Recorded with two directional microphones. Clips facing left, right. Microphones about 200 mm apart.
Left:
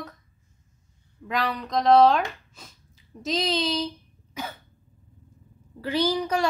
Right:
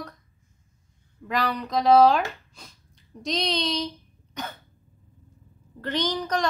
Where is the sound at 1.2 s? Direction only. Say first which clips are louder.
Right 1 dB; centre (ahead or behind).